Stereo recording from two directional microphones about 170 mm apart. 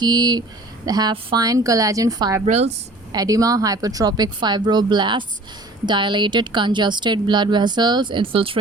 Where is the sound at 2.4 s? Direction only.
40° right (ahead or behind).